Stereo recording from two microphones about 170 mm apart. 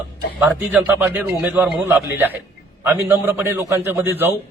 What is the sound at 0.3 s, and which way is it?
A man's voice, 5° right (ahead or behind).